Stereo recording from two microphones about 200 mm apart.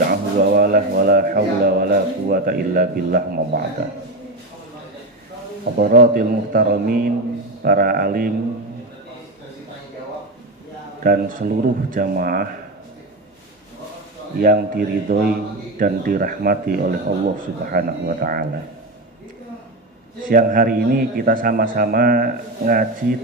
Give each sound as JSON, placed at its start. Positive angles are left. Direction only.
{"t": 0.1, "sound": "speech", "side_deg": -50}
{"t": 5.8, "sound": "speech", "side_deg": -50}
{"t": 11.1, "sound": "speech", "side_deg": -45}
{"t": 14.4, "sound": "speech", "side_deg": -45}
{"t": 20.2, "sound": "speech", "side_deg": -45}